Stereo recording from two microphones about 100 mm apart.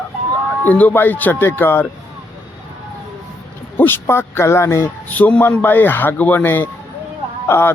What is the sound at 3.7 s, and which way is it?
Speech, 20° left (ahead or behind).